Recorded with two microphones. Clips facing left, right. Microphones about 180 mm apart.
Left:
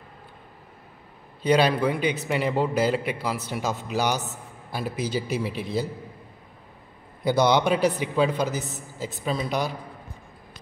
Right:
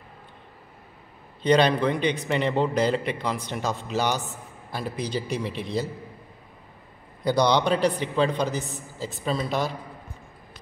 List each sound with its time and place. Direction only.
1.4 s a man's voice: 5° left (ahead or behind)
7.2 s a man's voice: 5° left (ahead or behind)
8.6 s a woman's voice: 20° left (ahead or behind)
9.1 s a man's voice: 5° left (ahead or behind)